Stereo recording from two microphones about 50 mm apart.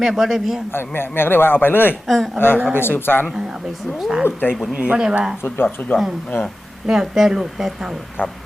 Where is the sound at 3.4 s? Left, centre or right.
Centre.